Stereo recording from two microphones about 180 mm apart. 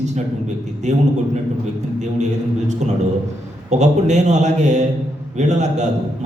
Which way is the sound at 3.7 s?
40° right (ahead or behind).